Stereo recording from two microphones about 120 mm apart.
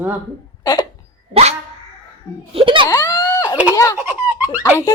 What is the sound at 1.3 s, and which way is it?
Dog, 65° right (ahead or behind).